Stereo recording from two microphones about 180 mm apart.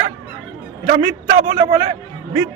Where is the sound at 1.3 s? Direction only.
35° right (ahead or behind).